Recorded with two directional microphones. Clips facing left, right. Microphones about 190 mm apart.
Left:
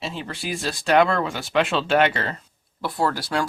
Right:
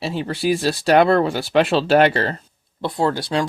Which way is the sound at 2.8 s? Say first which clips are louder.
Right 4 dB; 20° right (ahead or behind).